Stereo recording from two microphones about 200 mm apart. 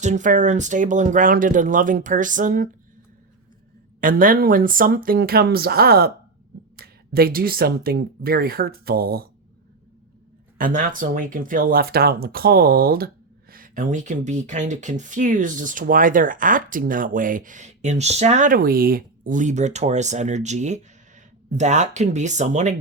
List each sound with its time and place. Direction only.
0.0 s speech: 35° right (ahead or behind)
4.0 s speech: 45° right (ahead or behind)
10.6 s speech: 40° right (ahead or behind)